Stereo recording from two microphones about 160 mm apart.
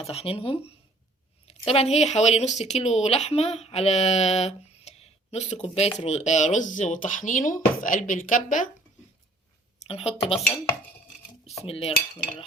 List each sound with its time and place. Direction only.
0.0 s speech: 40° left (ahead or behind); by 8.7 s 55° left (ahead or behind)
9.8 s speech: 40° left (ahead or behind)
11.4 s cutlery: 40° left (ahead or behind)